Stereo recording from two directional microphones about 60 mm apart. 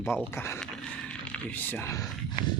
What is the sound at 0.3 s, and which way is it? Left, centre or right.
Speech, left.